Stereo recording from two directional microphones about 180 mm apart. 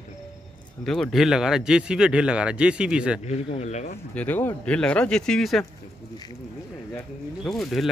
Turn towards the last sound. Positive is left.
turn(degrees=0)  # may be behind; listen again after turning